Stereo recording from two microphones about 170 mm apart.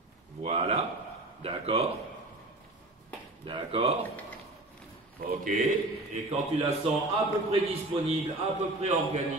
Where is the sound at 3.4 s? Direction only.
30° right (ahead or behind).